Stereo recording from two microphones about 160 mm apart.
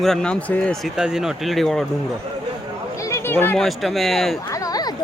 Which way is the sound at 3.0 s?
15° left (ahead or behind).